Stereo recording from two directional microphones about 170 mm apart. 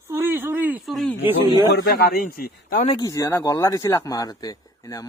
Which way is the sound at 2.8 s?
25° left (ahead or behind).